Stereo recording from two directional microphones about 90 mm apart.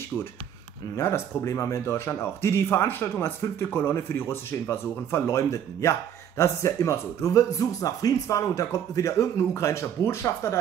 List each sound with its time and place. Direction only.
0.9 s a man's voice: 30° left (ahead or behind)